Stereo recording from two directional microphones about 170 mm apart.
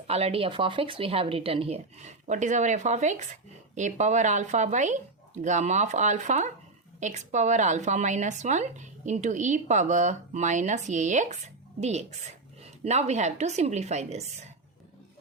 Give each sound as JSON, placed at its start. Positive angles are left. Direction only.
{"t": 0.1, "sound": "a woman's voice", "side_deg": -35}